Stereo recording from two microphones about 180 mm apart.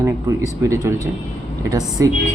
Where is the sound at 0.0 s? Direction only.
15° right (ahead or behind).